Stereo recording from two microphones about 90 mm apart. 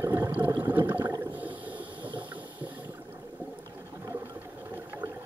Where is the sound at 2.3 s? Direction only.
20° right (ahead or behind).